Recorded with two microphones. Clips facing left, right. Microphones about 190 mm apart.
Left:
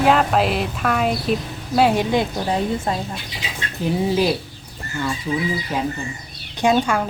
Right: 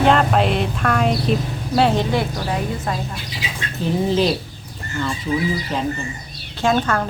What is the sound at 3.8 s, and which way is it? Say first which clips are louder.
Speech: right 1 dB; 10° left (ahead or behind).